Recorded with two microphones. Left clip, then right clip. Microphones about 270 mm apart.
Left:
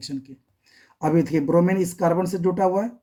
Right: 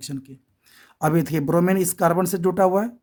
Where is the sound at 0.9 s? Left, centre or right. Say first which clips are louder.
Left 1 dB; right.